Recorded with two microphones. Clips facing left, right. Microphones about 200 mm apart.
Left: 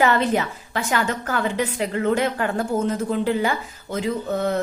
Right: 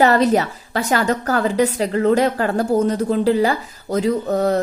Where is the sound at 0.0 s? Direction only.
40° right (ahead or behind).